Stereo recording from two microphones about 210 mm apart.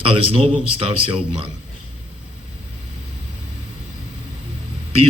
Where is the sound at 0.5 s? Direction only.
25° right (ahead or behind).